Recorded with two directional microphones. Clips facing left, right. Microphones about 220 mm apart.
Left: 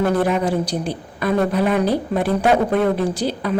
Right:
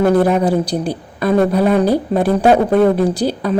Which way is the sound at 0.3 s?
40° right (ahead or behind).